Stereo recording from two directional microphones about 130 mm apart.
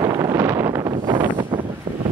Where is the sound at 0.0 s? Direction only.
30° right (ahead or behind).